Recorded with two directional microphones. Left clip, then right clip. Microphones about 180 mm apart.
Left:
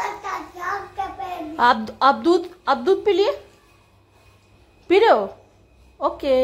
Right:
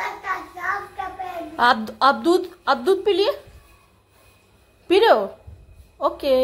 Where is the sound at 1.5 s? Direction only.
5° left (ahead or behind).